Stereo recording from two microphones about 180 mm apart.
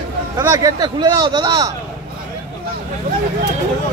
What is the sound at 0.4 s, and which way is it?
Speech, 20° right (ahead or behind).